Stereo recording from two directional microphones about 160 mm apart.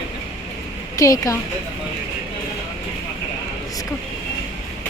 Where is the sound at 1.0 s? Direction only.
20° left (ahead or behind).